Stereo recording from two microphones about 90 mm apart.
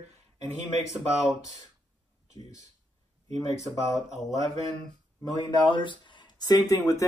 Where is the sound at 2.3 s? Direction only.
50° left (ahead or behind).